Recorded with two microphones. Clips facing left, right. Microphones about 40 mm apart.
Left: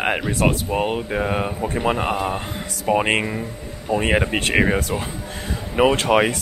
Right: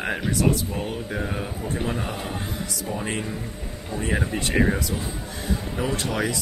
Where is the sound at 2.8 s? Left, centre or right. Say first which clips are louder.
Left 12 dB; left.